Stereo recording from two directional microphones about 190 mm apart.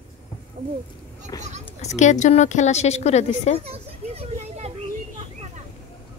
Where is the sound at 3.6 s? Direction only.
30° right (ahead or behind).